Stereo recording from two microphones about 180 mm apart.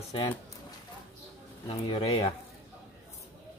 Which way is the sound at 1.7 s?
30° left (ahead or behind).